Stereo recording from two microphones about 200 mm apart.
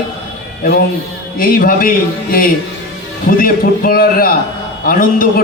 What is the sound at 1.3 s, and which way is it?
A man's voice, 45° left (ahead or behind).